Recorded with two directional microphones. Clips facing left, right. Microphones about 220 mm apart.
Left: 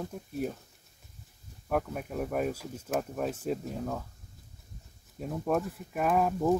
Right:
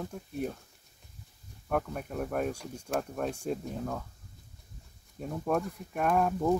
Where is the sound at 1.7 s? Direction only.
5° left (ahead or behind).